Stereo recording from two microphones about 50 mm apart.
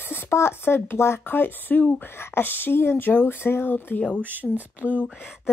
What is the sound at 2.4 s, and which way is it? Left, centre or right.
Speech, left.